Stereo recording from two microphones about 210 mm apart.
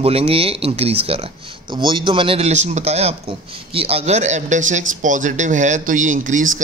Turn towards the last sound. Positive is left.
turn(degrees=-35)  # may be behind; listen again after turning